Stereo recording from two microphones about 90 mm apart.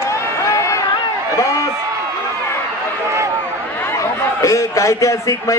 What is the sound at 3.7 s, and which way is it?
A man's voice, 30° left (ahead or behind).